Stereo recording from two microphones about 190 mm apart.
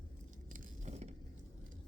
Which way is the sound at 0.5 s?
40° right (ahead or behind).